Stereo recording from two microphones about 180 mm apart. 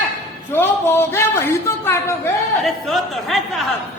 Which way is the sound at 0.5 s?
10° left (ahead or behind).